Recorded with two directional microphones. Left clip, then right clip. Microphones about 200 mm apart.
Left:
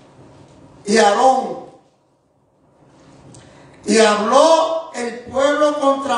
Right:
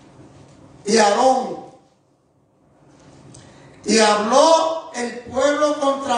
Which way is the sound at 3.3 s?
5° left (ahead or behind).